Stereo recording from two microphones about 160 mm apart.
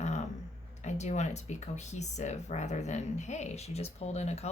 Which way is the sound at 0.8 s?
45° left (ahead or behind).